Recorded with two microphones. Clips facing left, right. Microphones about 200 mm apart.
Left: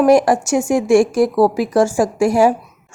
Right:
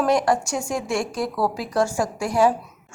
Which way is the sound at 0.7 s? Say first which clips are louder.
Left 14 dB; 85° left.